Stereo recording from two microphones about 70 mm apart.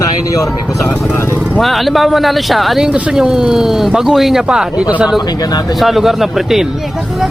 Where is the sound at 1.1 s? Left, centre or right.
Left.